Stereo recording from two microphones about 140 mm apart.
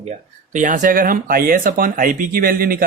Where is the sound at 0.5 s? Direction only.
65° right (ahead or behind); by 2.8 s 90° right.